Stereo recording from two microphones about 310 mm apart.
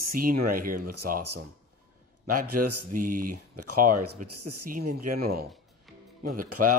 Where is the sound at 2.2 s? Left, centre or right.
Right.